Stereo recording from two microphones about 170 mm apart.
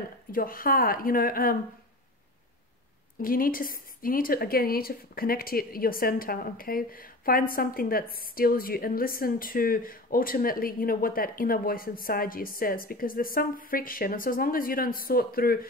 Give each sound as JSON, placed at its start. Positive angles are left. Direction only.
{"t": 0.3, "sound": "a woman's voice", "side_deg": 55}
{"t": 3.2, "sound": "a woman's voice", "side_deg": 55}